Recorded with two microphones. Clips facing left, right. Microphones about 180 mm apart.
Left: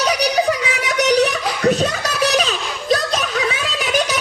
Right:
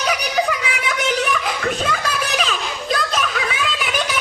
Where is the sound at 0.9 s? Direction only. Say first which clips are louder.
Left 6 dB; 40° left (ahead or behind).